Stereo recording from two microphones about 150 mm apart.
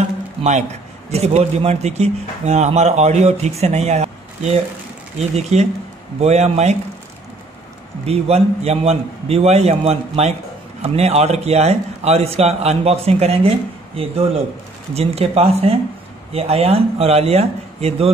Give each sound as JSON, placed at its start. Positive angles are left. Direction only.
{"t": 0.4, "sound": "a man's voice", "side_deg": -50}
{"t": 8.0, "sound": "a man's voice", "side_deg": -45}